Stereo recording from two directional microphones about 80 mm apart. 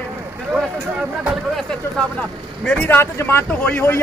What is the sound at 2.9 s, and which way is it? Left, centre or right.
Speech, left.